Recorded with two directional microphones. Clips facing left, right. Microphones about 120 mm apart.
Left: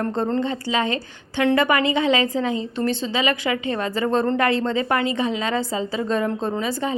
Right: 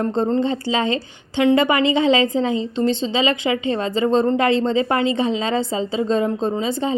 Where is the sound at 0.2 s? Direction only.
25° right (ahead or behind).